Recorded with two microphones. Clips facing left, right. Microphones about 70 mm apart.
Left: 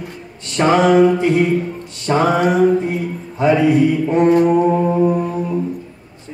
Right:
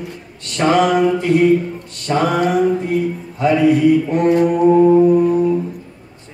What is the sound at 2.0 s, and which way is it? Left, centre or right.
Mantra, left.